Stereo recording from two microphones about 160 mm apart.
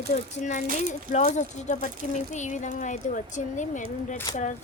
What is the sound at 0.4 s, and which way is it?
Speech, 50° left (ahead or behind).